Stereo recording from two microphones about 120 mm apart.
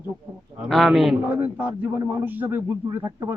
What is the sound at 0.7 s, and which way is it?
Speech, centre (ahead or behind).